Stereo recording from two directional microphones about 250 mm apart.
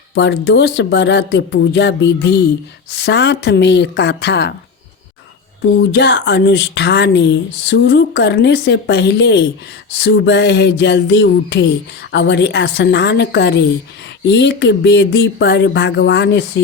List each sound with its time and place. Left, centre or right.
0.1 s speech: left
5.7 s speech: left